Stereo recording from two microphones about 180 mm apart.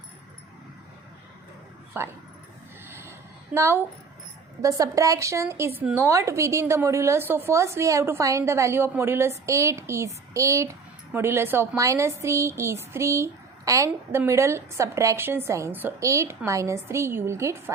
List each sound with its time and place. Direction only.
2.0 s a woman's voice: 15° right (ahead or behind)
2.9 s a sound: 15° right (ahead or behind)
4.6 s a woman's voice: 20° right (ahead or behind)